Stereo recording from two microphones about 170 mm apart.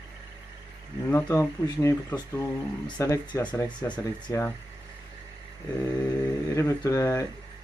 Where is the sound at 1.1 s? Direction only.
15° left (ahead or behind).